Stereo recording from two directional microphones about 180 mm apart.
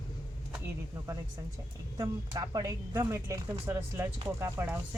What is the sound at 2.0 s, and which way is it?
Speech, 20° right (ahead or behind).